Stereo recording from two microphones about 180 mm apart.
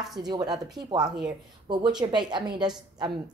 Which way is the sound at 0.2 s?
20° right (ahead or behind).